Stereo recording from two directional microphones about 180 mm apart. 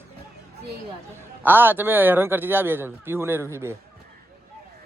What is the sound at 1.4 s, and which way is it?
A man's voice, 10° right (ahead or behind).